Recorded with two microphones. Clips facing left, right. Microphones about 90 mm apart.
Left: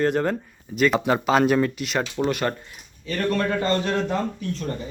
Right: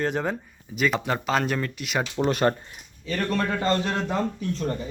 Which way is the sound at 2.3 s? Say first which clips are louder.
Right 3 dB; 30° right (ahead or behind).